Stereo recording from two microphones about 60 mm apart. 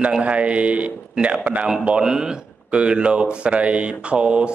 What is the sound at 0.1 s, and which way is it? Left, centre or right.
A man's voice, centre.